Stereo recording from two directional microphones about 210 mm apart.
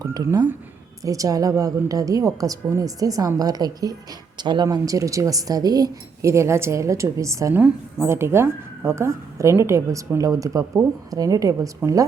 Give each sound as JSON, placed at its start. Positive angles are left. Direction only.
{"t": 0.0, "sound": "speech", "side_deg": -15}